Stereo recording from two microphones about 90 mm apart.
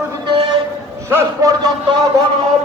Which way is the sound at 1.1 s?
40° right (ahead or behind).